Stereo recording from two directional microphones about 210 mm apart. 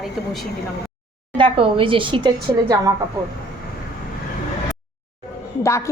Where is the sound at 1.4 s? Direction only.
25° right (ahead or behind).